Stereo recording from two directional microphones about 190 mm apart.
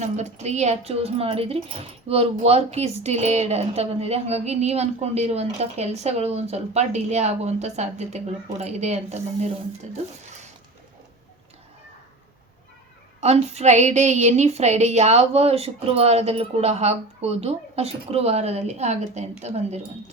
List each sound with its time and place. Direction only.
0.0 s speech: 35° right (ahead or behind)
13.1 s speech: 35° right (ahead or behind)